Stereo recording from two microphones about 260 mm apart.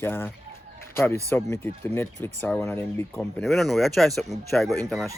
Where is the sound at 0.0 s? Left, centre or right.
Centre.